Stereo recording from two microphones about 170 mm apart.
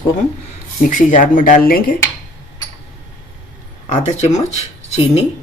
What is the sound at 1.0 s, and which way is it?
Speech, 50° left (ahead or behind).